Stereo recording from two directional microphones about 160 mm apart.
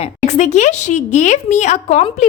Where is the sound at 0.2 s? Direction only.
50° left (ahead or behind).